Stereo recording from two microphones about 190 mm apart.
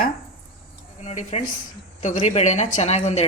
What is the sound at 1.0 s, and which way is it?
Speech, 35° left (ahead or behind).